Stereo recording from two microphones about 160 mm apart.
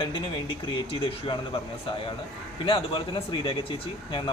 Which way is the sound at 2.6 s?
30° left (ahead or behind).